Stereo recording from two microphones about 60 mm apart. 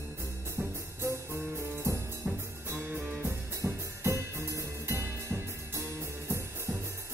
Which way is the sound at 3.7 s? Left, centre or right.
Right.